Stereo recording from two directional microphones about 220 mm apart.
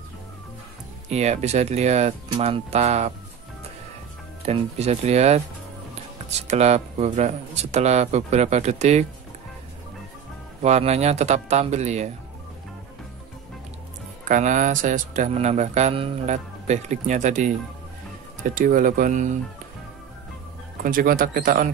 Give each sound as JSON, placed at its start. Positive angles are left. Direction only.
{"t": 1.1, "sound": "speech", "side_deg": -30}
{"t": 4.5, "sound": "speech", "side_deg": -30}
{"t": 6.4, "sound": "speech", "side_deg": -30}
{"t": 10.6, "sound": "speech", "side_deg": -30}
{"t": 14.2, "sound": "speech", "side_deg": -35}
{"t": 20.8, "sound": "speech", "side_deg": -40}